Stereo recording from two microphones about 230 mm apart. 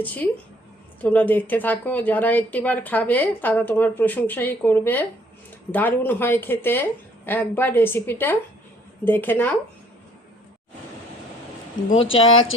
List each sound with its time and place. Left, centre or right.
0.0 s a woman's voice: centre
12.2 s speech: left